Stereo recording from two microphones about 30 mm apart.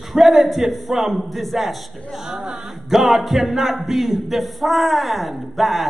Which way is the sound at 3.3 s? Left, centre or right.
Centre.